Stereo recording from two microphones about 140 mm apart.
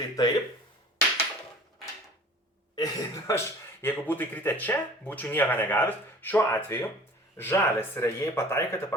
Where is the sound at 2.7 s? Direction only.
25° left (ahead or behind).